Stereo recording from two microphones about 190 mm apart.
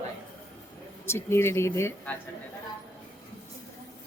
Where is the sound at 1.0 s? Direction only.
15° left (ahead or behind).